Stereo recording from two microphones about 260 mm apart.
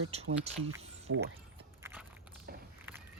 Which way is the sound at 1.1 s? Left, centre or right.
Right.